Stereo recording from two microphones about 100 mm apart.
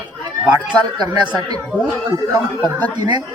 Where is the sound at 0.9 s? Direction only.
45° right (ahead or behind).